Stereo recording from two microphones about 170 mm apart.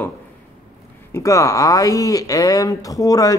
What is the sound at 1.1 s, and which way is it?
Speech, 20° left (ahead or behind).